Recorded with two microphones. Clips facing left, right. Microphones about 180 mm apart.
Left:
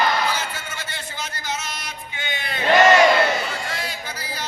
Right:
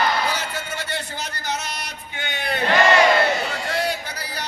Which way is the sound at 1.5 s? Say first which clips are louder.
Right 2 dB; 65° right (ahead or behind).